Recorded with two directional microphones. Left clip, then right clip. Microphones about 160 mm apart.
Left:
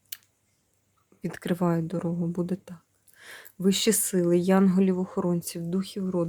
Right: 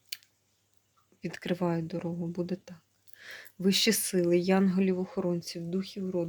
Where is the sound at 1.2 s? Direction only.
30° left (ahead or behind).